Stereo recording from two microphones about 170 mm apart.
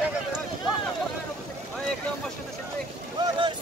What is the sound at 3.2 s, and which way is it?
Boat, 25° right (ahead or behind).